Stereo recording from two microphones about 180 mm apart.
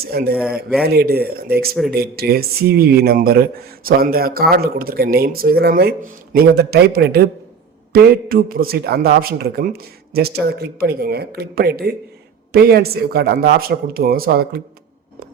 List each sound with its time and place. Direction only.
0.0 s speech: 60° right (ahead or behind)
0.4 s a man's voice: 5° right (ahead or behind)
0.9 s speech: 60° right (ahead or behind)